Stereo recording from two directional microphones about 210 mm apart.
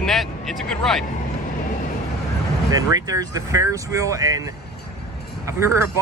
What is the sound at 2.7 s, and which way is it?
Speech, 15° right (ahead or behind).